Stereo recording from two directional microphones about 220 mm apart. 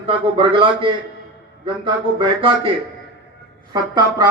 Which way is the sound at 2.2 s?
25° right (ahead or behind).